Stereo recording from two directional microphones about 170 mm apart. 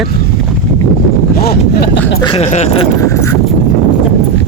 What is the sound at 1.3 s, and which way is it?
Speech, 65° left (ahead or behind).